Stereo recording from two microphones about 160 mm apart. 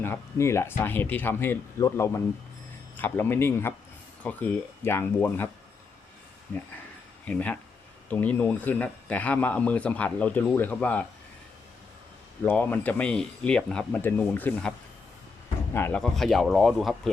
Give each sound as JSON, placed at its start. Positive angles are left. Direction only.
{"t": 0.0, "sound": "speech", "side_deg": 15}
{"t": 6.5, "sound": "speech", "side_deg": 10}
{"t": 12.4, "sound": "speech", "side_deg": 10}
{"t": 15.7, "sound": "speech", "side_deg": 15}
{"t": 16.0, "sound": "speech", "side_deg": 0}